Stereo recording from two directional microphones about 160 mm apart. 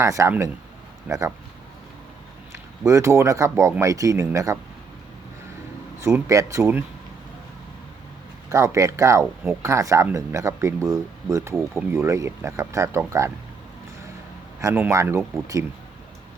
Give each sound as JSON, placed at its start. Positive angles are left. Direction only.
{"t": 0.0, "sound": "speech", "side_deg": -20}
{"t": 2.5, "sound": "speech", "side_deg": -20}
{"t": 6.0, "sound": "speech", "side_deg": -15}
{"t": 8.4, "sound": "speech", "side_deg": -20}
{"t": 14.6, "sound": "speech", "side_deg": -15}